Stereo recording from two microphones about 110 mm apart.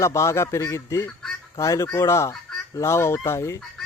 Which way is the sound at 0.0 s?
25° left (ahead or behind).